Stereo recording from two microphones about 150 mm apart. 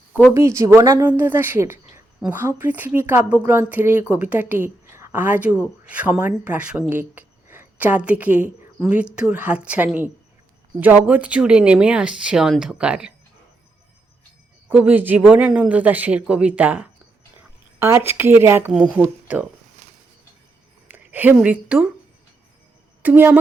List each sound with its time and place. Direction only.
0.3 s a woman's voice: 20° right (ahead or behind)
14.7 s a woman's voice: 10° right (ahead or behind)
20.8 s a woman's voice: 10° right (ahead or behind)
23.0 s a woman's voice: 10° right (ahead or behind)